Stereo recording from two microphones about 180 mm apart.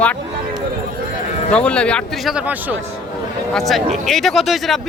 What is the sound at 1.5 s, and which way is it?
Speech, 5° left (ahead or behind).